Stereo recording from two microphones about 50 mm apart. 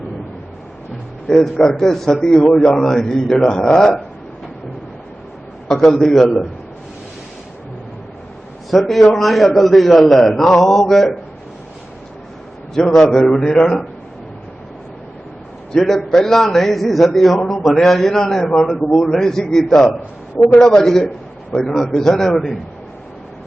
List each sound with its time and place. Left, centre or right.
1.3 s a man's voice: centre
5.6 s a man's voice: centre
8.7 s a man's voice: centre
12.7 s a man's voice: centre
15.7 s a man's voice: centre